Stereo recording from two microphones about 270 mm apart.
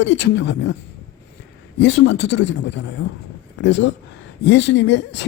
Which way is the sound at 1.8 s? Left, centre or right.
Left.